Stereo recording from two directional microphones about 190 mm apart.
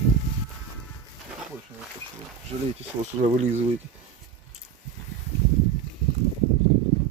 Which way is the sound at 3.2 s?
35° right (ahead or behind).